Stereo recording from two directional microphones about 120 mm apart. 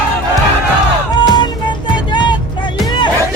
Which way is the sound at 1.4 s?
40° left (ahead or behind).